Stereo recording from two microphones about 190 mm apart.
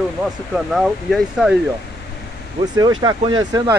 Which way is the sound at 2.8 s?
20° right (ahead or behind).